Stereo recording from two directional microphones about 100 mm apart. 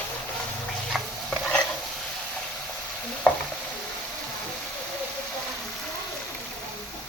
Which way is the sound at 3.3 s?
20° left (ahead or behind).